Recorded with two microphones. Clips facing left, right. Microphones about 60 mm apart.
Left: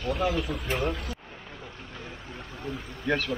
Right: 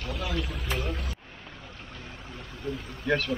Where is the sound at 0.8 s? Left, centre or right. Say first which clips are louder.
Left 4 dB; left.